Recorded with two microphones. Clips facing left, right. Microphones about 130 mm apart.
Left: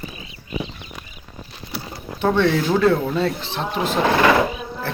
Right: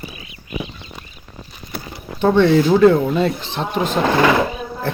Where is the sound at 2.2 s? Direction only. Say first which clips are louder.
Right 5 dB; centre (ahead or behind).